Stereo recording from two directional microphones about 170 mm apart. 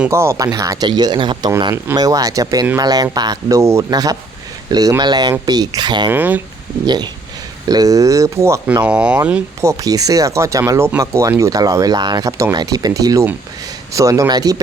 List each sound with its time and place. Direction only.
0.0 s speech: 15° right (ahead or behind)
6.1 s speech: 10° right (ahead or behind)
6.8 s speech: 25° right (ahead or behind)
8.9 s speech: 5° right (ahead or behind); by 14.5 s 20° right (ahead or behind)